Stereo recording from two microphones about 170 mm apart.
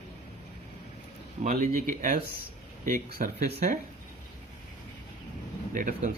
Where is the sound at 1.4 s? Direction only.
55° right (ahead or behind).